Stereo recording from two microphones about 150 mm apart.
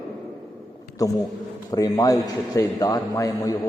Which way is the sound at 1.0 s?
25° left (ahead or behind).